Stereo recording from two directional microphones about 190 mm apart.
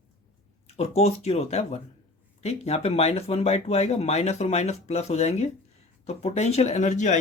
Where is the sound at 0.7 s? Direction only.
35° left (ahead or behind).